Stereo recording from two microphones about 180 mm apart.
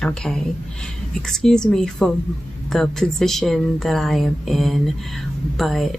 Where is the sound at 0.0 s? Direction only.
5° left (ahead or behind).